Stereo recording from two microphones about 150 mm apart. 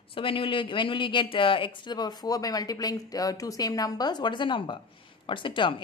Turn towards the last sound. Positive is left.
turn(degrees=35)  # may be behind; listen again after turning